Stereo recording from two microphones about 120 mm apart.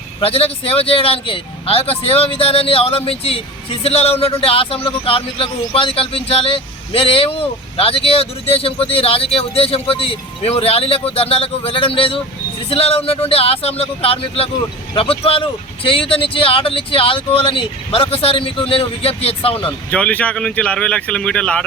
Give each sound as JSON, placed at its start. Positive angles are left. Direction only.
{"t": 0.2, "sound": "speech", "side_deg": 50}
{"t": 19.9, "sound": "speech", "side_deg": 10}